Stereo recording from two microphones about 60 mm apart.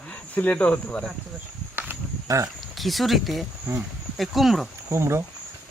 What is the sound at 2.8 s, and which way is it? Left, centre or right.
Speech, centre.